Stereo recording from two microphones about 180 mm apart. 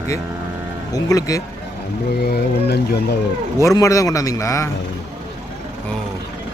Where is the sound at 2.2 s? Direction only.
65° left (ahead or behind).